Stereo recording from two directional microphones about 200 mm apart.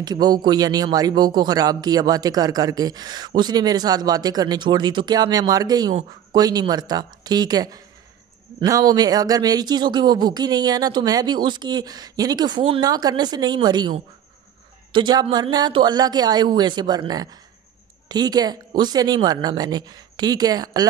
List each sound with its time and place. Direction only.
0.0 s speech: 20° right (ahead or behind)